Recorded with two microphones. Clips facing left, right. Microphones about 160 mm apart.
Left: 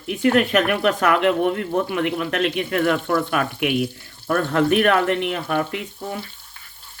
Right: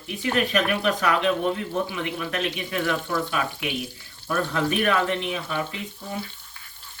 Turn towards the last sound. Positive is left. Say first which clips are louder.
# left 5 dB
turn(degrees=60)  # may be behind; listen again after turning